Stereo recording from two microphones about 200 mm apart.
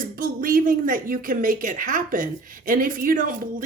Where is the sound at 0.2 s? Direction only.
45° right (ahead or behind).